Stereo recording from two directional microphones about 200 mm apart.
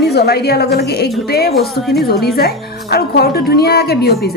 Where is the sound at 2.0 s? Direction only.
50° left (ahead or behind).